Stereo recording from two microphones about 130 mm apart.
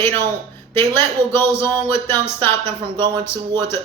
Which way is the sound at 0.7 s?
20° left (ahead or behind).